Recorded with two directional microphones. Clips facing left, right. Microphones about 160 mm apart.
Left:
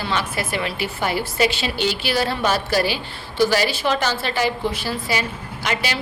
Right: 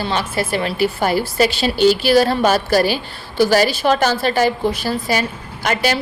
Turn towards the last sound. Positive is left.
turn(degrees=-45)  # may be behind; listen again after turning